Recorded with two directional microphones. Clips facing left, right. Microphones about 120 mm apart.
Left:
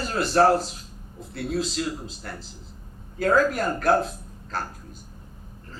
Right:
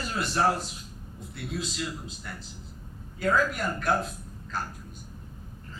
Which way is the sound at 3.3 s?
35° left (ahead or behind).